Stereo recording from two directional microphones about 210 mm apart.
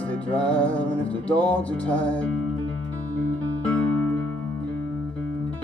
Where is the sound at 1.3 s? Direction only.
5° left (ahead or behind).